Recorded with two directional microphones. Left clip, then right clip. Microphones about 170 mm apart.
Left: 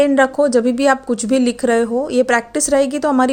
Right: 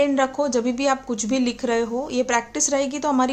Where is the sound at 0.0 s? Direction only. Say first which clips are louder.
Left 7 dB; 30° left (ahead or behind).